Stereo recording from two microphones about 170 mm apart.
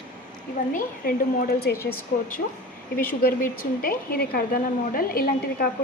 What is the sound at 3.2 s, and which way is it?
A woman's voice, 55° left (ahead or behind).